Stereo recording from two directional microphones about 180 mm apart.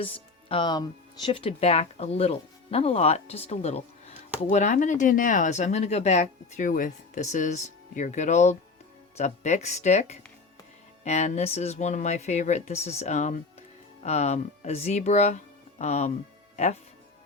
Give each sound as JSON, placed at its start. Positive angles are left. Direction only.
{"t": 0.0, "sound": "speech", "side_deg": 30}